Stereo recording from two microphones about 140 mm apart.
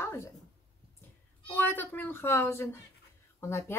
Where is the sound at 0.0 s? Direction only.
20° left (ahead or behind).